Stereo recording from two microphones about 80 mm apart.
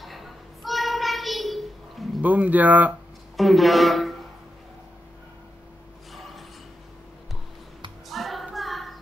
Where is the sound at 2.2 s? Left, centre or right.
Right.